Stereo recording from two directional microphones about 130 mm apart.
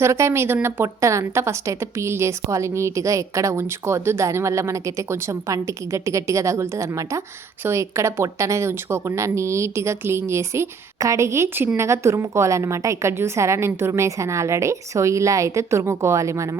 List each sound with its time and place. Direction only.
0.0 s a woman's voice: 20° right (ahead or behind)